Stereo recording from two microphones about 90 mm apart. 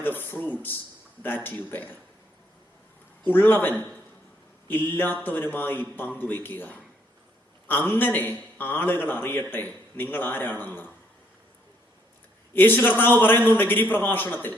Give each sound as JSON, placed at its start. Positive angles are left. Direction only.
{"t": 0.0, "sound": "a man's voice", "side_deg": 20}
{"t": 3.2, "sound": "a man's voice", "side_deg": 20}
{"t": 12.5, "sound": "a man's voice", "side_deg": 20}